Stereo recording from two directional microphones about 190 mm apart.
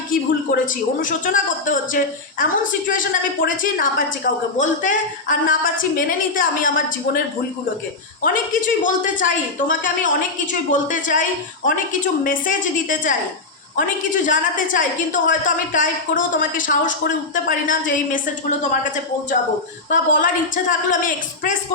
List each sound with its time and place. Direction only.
0.1 s a woman's voice: 45° left (ahead or behind)
8.2 s a woman's voice: 45° left (ahead or behind)